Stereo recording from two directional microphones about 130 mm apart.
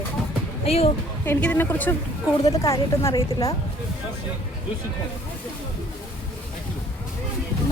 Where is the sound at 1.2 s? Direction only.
15° left (ahead or behind).